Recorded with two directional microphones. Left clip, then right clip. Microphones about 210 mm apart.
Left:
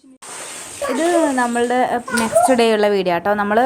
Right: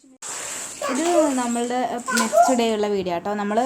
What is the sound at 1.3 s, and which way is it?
A woman's voice, 20° left (ahead or behind).